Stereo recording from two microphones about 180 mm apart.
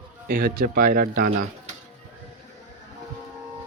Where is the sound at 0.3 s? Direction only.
55° right (ahead or behind).